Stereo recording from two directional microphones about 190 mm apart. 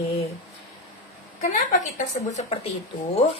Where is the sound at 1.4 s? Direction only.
40° left (ahead or behind).